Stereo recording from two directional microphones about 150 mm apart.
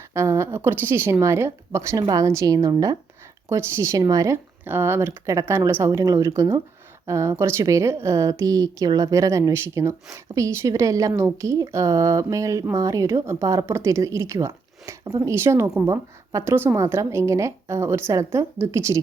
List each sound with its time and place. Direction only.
0.1 s a woman's voice: 20° right (ahead or behind)